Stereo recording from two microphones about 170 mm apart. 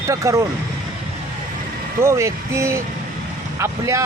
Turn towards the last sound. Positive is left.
turn(degrees=-15)  # may be behind; listen again after turning